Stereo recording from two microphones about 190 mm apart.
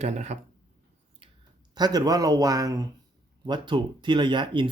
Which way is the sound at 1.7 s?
20° right (ahead or behind).